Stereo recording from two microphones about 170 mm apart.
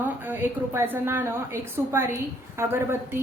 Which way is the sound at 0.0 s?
10° right (ahead or behind).